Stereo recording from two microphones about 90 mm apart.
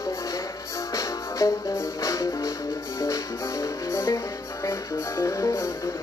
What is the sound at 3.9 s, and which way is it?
Music, 30° left (ahead or behind).